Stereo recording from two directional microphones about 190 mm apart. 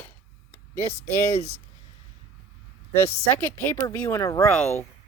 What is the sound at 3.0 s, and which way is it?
Speech, 10° left (ahead or behind).